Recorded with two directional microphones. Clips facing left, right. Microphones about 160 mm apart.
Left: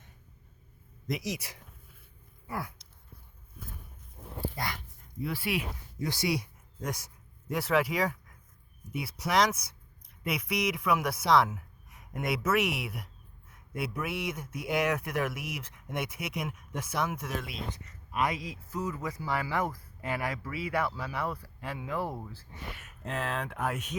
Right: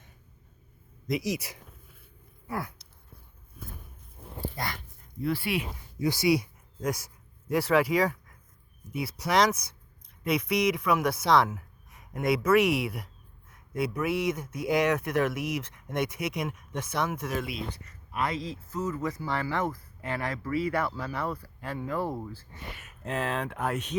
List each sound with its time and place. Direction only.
1.0 s speech: 5° right (ahead or behind)
4.4 s dog: 10° left (ahead or behind)
5.2 s speech: 5° left (ahead or behind)
6.0 s speech: 10° right (ahead or behind)
7.5 s speech: centre (ahead or behind)
17.7 s a man's voice: 15° left (ahead or behind)